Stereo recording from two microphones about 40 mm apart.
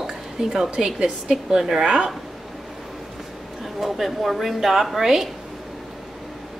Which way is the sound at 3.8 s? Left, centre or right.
Centre.